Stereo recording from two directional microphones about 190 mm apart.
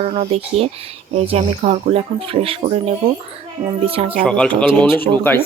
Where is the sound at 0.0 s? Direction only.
30° right (ahead or behind).